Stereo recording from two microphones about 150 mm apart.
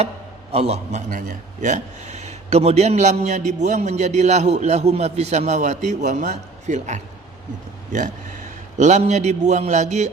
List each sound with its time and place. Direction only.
0.5 s a man's voice: 45° right (ahead or behind)